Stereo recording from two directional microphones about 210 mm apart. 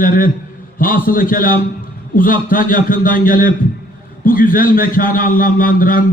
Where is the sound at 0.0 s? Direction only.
40° left (ahead or behind).